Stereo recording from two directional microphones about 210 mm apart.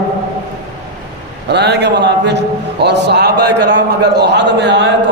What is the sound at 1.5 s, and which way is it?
A man's voice, 55° right (ahead or behind).